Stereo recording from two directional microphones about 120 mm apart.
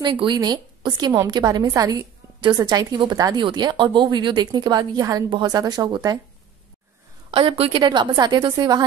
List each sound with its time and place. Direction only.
0.0 s a woman's voice: 40° right (ahead or behind)
7.2 s a woman's voice: 50° right (ahead or behind)
7.8 s a woman's voice: 35° right (ahead or behind)